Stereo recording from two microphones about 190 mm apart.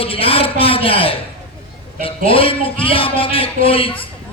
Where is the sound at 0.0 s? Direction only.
30° left (ahead or behind).